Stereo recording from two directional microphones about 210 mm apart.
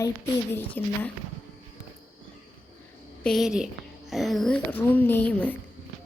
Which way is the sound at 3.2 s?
Centre (ahead or behind).